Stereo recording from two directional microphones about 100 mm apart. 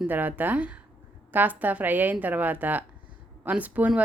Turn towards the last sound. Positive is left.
turn(degrees=-15)  # may be behind; listen again after turning